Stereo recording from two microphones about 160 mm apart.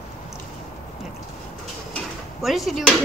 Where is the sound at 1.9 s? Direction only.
Centre (ahead or behind).